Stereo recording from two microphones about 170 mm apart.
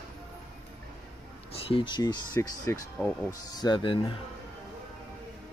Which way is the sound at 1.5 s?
35° left (ahead or behind).